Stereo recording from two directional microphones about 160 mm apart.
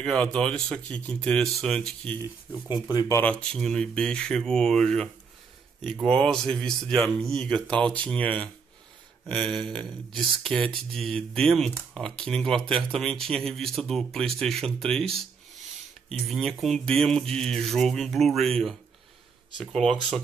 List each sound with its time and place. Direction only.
0.0 s speech: 5° left (ahead or behind)
2.7 s speech: 25° left (ahead or behind)
3.2 s speech: 5° left (ahead or behind)